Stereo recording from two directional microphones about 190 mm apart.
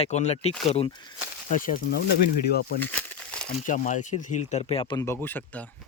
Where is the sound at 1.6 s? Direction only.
45° left (ahead or behind).